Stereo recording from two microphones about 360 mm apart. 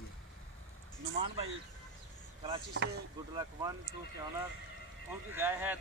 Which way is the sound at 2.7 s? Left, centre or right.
Right.